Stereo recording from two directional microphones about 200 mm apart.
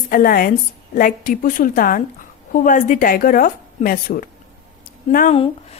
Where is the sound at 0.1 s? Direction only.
45° left (ahead or behind).